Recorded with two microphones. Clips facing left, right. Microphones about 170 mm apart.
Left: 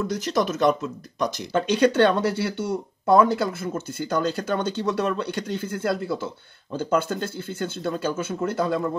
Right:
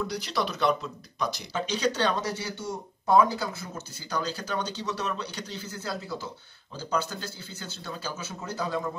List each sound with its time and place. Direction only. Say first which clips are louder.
0.0 s speech: left 6 dB; 45° left (ahead or behind)